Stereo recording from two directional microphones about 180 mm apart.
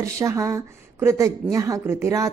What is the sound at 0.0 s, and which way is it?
A woman's voice, 15° right (ahead or behind).